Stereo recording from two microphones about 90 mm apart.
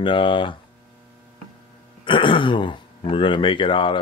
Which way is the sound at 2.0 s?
65° left (ahead or behind).